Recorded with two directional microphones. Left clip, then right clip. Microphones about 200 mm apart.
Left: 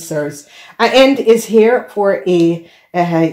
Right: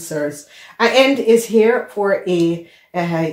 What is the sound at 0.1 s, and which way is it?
Speech, 50° left (ahead or behind).